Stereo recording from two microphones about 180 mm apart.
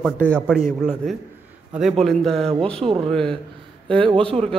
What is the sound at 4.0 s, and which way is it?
Speech, 30° right (ahead or behind).